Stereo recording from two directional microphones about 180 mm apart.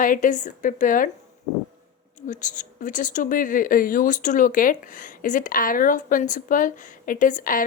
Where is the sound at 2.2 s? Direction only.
45° left (ahead or behind).